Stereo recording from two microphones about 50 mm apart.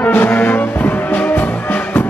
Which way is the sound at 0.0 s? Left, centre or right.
Left.